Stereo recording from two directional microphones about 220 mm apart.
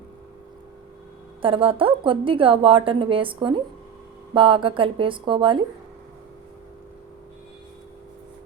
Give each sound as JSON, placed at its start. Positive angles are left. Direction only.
{"t": 1.4, "sound": "a woman's voice", "side_deg": -25}